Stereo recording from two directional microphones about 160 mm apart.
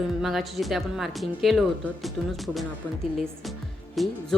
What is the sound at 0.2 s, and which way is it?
Speech, centre (ahead or behind).